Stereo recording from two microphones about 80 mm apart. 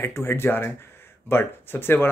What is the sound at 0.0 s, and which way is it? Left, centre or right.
Speech, left.